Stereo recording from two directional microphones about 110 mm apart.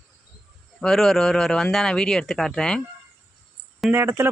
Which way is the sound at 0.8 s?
5° left (ahead or behind).